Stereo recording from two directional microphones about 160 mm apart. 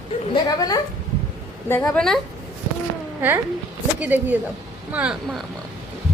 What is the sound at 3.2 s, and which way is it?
A woman's voice, 10° right (ahead or behind).